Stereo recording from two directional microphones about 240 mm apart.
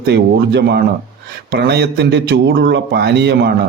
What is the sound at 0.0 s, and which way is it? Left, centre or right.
A man's voice, right.